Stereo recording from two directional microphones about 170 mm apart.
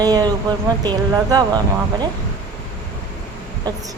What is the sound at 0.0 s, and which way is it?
Speech, 25° right (ahead or behind).